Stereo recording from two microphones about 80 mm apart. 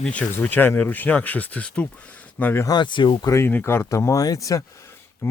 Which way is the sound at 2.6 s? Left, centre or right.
Left.